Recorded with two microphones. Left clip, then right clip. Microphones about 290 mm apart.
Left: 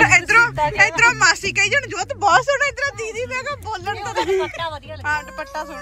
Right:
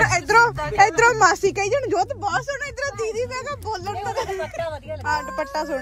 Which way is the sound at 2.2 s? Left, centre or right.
Centre.